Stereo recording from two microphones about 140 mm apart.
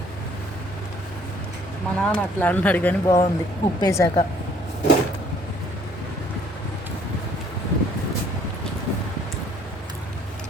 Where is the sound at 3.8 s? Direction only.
25° left (ahead or behind).